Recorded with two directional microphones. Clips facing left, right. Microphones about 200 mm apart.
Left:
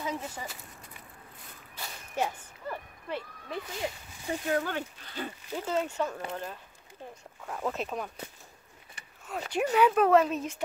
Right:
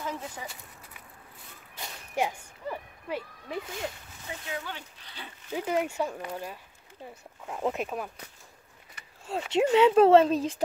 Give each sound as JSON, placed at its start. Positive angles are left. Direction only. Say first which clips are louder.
{"t": 0.0, "sound": "speech", "louder": "left 1 dB", "side_deg": 10}
{"t": 2.1, "sound": "a sound", "louder": "right 2 dB", "side_deg": -10}
{"t": 4.5, "sound": "speech", "louder": "left 9 dB", "side_deg": 50}
{"t": 5.5, "sound": "speech", "louder": "right 3 dB", "side_deg": -15}
{"t": 9.2, "sound": "speech", "louder": "right 5 dB", "side_deg": -25}